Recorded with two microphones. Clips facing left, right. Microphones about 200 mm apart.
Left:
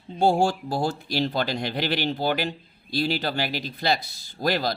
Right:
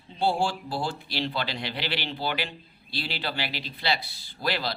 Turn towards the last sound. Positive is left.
turn(degrees=45)  # may be behind; listen again after turning